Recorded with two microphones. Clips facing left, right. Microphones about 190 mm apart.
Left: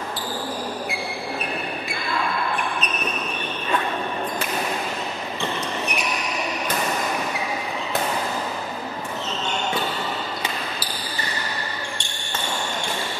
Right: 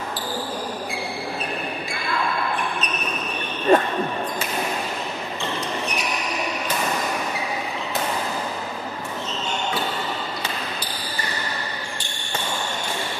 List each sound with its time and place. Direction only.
3.7 s basketball bounce: 45° right (ahead or behind)